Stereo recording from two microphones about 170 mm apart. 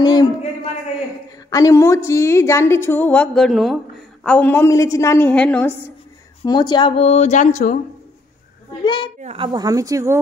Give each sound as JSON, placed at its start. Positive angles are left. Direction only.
{"t": 0.0, "sound": "a woman's voice", "side_deg": 25}
{"t": 1.5, "sound": "a woman's voice", "side_deg": 20}
{"t": 6.4, "sound": "a woman's voice", "side_deg": 25}
{"t": 8.8, "sound": "a woman's voice", "side_deg": 30}
{"t": 9.2, "sound": "speech", "side_deg": -35}